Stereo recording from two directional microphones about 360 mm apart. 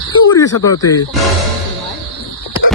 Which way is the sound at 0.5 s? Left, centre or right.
Left.